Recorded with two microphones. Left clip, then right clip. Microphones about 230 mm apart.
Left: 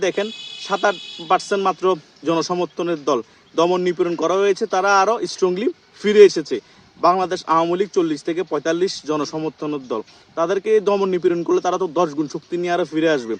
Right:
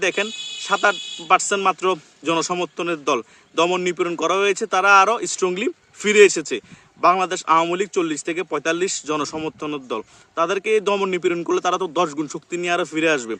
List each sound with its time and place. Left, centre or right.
0.0 s a man's voice: centre